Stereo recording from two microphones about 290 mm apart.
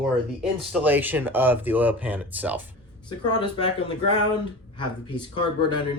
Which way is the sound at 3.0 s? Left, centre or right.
Centre.